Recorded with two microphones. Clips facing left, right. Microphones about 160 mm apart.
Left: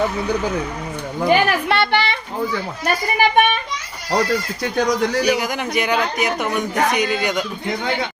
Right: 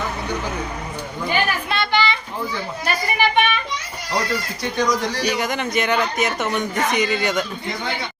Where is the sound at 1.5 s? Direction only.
70° left (ahead or behind).